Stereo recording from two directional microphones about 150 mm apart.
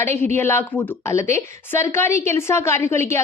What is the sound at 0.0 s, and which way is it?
A woman's voice, 15° left (ahead or behind).